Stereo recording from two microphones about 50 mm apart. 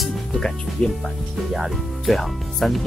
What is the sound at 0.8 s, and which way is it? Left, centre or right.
Speech, centre.